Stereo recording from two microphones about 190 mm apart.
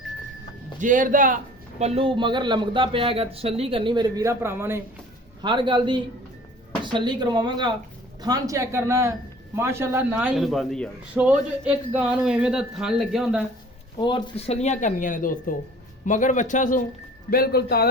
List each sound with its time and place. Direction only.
0.8 s a man's voice: 45° right (ahead or behind)
1.8 s a man's voice: 30° right (ahead or behind); by 4.8 s 10° right (ahead or behind)
5.4 s a man's voice: 25° right (ahead or behind); by 13.4 s centre (ahead or behind)
14.0 s a woman's voice: 25° left (ahead or behind); by 16.8 s 40° left (ahead or behind)
17.3 s speech: 55° left (ahead or behind)